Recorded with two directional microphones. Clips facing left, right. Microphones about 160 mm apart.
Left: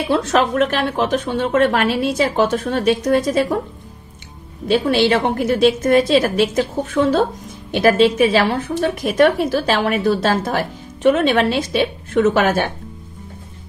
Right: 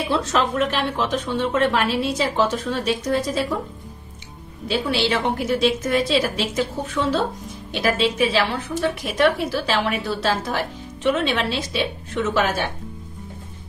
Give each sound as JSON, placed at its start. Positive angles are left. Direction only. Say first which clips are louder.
{"t": 0.1, "sound": "a woman's voice", "louder": "left 6 dB", "side_deg": 60}
{"t": 4.6, "sound": "speech", "louder": "left 7 dB", "side_deg": 50}